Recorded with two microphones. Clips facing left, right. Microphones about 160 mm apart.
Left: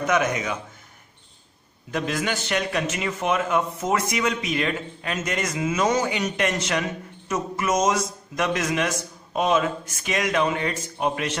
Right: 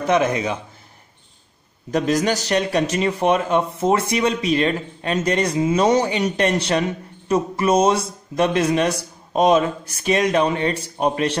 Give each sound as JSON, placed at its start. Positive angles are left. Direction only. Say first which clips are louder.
{"t": 0.0, "sound": "speech", "louder": "right 4 dB", "side_deg": -30}
{"t": 1.9, "sound": "a man's voice", "louder": "right 7 dB", "side_deg": -40}